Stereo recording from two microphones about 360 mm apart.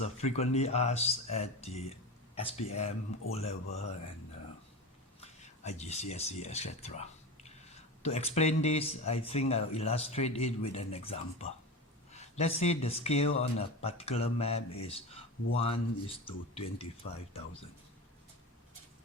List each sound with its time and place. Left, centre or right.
0.0 s speech: centre
5.2 s speech: centre